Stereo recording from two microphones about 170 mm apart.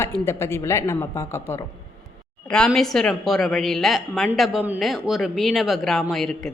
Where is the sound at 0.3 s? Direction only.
15° left (ahead or behind).